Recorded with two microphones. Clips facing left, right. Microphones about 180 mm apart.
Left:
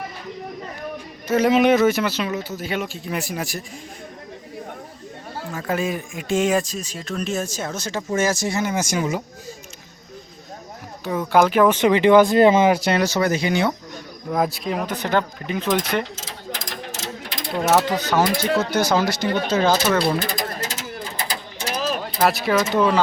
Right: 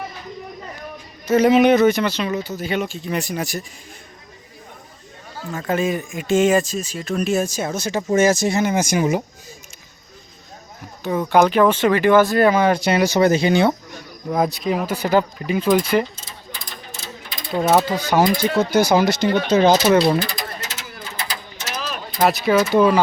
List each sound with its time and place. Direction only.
1.3 s speech: centre (ahead or behind)
5.5 s speech: centre (ahead or behind); by 9.2 s 20° right (ahead or behind)
11.0 s speech: centre (ahead or behind); by 12.7 s 20° left (ahead or behind)
12.7 s speech: centre (ahead or behind)
13.0 s speech: 15° right (ahead or behind)
13.2 s speech: 30° right (ahead or behind)
14.3 s speech: centre (ahead or behind)
16.1 s ratchet: 90° left
17.8 s speech: 10° right (ahead or behind)
20.6 s mechanisms: 35° left (ahead or behind)
22.2 s speech: centre (ahead or behind)